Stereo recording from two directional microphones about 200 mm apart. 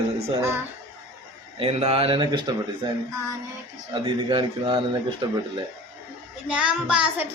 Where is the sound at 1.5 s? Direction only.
30° right (ahead or behind).